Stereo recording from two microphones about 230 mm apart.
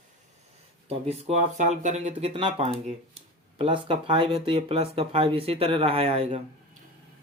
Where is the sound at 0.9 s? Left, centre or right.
Right.